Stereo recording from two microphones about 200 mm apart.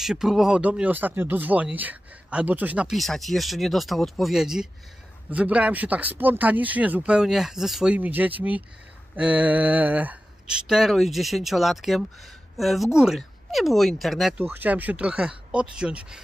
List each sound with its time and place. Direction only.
0.0 s speech: centre (ahead or behind)